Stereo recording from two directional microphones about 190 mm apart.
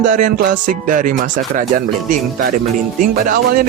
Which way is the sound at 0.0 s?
45° right (ahead or behind).